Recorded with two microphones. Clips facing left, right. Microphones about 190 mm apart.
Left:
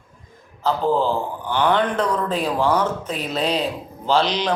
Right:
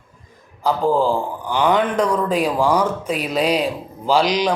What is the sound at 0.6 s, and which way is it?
A man's voice, 10° right (ahead or behind).